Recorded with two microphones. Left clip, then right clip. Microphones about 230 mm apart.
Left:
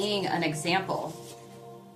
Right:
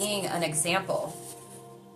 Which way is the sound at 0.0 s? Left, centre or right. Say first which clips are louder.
Left 1 dB; centre.